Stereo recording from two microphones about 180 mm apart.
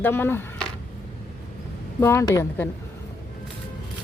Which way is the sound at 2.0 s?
15° left (ahead or behind).